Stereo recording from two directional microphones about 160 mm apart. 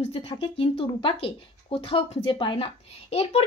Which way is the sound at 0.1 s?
35° left (ahead or behind).